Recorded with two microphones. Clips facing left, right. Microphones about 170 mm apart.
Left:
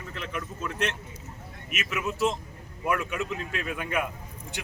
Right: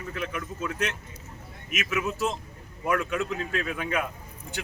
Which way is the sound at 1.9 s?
Centre (ahead or behind).